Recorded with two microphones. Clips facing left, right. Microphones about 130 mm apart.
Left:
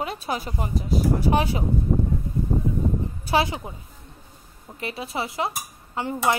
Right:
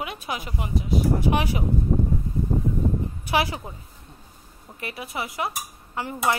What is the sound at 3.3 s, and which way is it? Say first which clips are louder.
Speech: left 2 dB; 25° left (ahead or behind).